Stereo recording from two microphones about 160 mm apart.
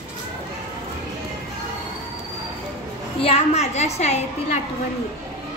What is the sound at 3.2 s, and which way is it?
A child's voice, 40° left (ahead or behind).